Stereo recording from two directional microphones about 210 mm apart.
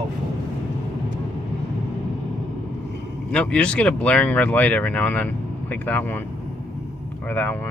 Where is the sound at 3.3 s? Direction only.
5° left (ahead or behind).